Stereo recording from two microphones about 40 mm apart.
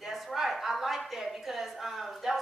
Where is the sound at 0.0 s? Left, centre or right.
Centre.